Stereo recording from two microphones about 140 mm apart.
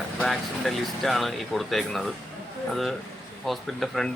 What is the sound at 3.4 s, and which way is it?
Speech, centre (ahead or behind).